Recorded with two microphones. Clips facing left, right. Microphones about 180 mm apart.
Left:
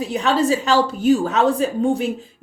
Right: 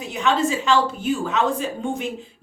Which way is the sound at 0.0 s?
35° left (ahead or behind).